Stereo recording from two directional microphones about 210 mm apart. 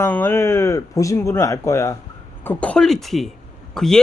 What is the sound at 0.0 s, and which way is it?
Speech, 10° left (ahead or behind).